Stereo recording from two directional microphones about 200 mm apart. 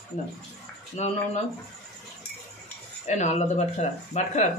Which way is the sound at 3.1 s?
35° left (ahead or behind).